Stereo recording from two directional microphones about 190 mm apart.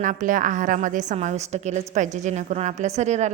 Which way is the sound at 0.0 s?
45° right (ahead or behind).